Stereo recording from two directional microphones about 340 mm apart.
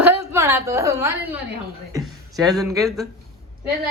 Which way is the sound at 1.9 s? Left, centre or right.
Centre.